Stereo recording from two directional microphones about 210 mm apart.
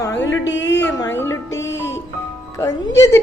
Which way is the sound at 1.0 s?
10° left (ahead or behind).